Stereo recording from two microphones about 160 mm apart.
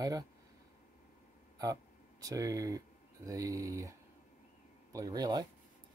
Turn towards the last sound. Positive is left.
turn(degrees=-25)  # may be behind; listen again after turning